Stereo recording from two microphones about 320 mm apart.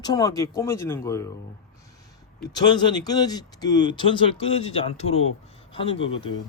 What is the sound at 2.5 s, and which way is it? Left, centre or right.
A man's voice, centre.